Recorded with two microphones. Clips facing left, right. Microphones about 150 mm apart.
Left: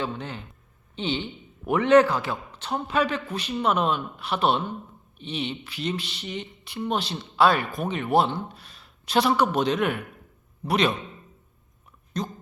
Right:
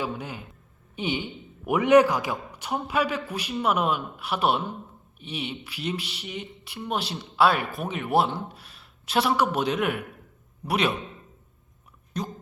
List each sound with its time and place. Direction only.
0.0 s speech: 10° right (ahead or behind)
12.1 s speech: 10° right (ahead or behind)